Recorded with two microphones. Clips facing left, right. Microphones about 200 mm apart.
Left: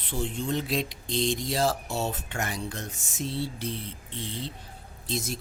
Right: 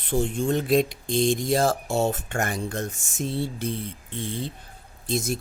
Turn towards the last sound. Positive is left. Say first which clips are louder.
# right 6 dB
turn(degrees=-50)  # may be behind; listen again after turning